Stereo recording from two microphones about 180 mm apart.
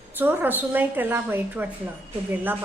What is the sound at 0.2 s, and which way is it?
A woman's voice, 10° right (ahead or behind).